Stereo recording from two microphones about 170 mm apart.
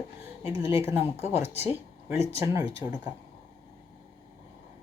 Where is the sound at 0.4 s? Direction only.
15° right (ahead or behind).